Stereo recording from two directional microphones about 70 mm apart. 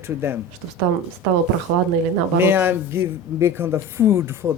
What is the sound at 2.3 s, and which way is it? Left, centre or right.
A man's voice, right.